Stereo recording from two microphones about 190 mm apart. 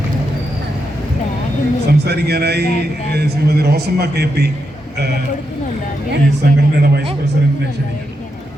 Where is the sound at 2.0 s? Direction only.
60° right (ahead or behind).